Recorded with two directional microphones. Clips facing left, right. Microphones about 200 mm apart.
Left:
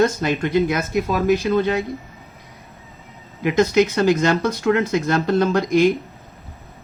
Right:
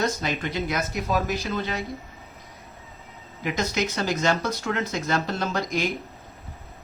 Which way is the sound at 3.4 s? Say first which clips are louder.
Left 10 dB; 55° left (ahead or behind).